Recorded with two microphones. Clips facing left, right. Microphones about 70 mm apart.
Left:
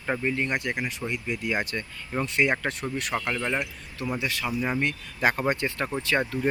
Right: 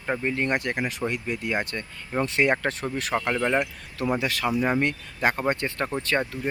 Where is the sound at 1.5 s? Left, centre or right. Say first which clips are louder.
Even; centre.